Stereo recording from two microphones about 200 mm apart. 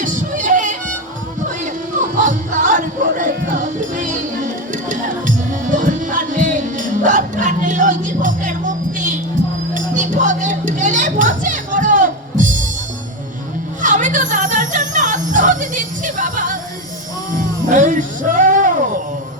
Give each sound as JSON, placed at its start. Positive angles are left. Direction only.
{"t": 0.0, "sound": "music", "side_deg": -40}
{"t": 9.7, "sound": "a sound", "side_deg": -40}
{"t": 13.8, "sound": "music", "side_deg": -40}